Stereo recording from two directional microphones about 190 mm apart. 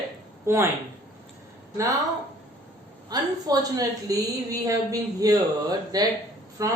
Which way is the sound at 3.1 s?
20° right (ahead or behind).